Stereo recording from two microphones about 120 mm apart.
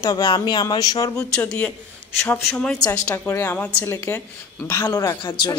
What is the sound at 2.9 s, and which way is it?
A woman's voice, 15° left (ahead or behind).